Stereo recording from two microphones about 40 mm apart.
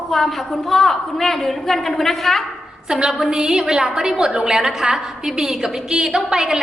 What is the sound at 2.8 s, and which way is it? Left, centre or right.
A woman's voice, centre.